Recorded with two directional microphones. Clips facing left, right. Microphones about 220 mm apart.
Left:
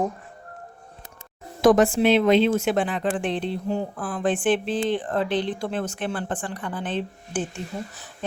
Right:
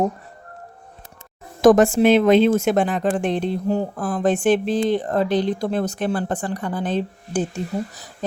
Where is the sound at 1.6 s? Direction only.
45° right (ahead or behind).